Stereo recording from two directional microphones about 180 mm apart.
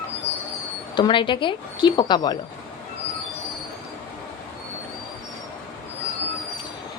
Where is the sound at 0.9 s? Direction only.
25° left (ahead or behind).